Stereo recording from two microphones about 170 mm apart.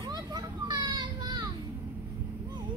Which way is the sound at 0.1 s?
25° right (ahead or behind).